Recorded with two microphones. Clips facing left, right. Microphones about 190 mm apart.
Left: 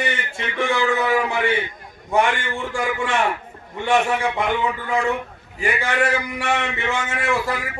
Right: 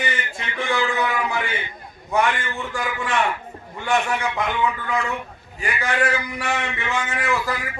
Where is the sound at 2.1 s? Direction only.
25° left (ahead or behind).